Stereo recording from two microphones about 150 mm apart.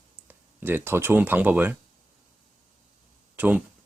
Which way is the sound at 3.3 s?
10° right (ahead or behind).